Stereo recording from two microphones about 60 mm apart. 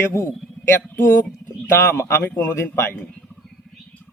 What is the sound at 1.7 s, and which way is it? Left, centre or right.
Speech, left.